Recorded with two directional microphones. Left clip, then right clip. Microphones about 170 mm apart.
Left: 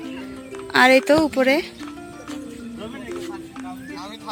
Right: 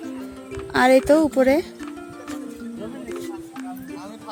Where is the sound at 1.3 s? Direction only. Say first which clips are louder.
Right 1 dB; 20° right (ahead or behind).